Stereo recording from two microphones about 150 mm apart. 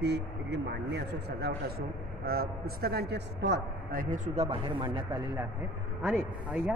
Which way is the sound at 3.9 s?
75° right (ahead or behind).